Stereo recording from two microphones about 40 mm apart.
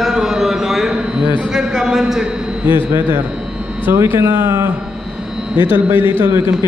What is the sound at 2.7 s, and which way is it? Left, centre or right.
Speech, right.